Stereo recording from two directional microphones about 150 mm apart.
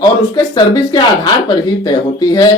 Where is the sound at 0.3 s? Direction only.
25° left (ahead or behind).